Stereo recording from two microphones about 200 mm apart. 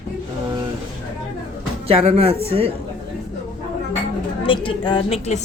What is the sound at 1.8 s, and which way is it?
Speech, 30° right (ahead or behind).